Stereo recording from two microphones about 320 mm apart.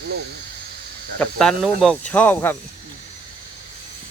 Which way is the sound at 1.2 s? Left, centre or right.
Centre.